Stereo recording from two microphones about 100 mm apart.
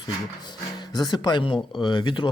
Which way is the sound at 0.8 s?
45° left (ahead or behind).